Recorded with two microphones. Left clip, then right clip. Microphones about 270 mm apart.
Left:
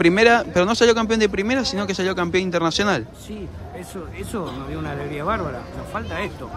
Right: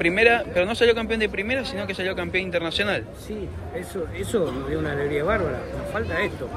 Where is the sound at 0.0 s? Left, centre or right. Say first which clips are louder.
Left 4 dB; left.